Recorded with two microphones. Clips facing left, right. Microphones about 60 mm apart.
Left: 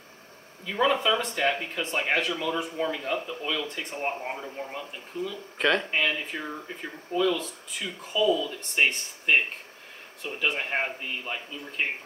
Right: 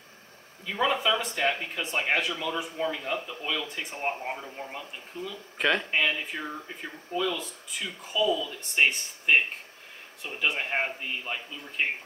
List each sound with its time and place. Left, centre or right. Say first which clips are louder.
0.7 s speech: left 2 dB; centre